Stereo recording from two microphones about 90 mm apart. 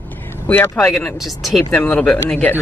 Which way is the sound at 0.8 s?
5° left (ahead or behind).